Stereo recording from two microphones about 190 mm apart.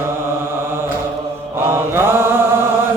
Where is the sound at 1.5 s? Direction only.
10° right (ahead or behind).